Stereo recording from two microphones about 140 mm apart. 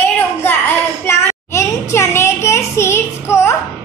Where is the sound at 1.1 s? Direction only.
20° left (ahead or behind).